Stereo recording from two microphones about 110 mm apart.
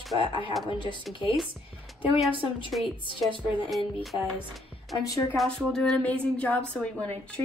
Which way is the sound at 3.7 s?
Centre (ahead or behind).